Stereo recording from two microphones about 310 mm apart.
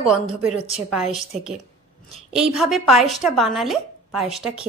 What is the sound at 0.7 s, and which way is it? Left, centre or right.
Speech, centre.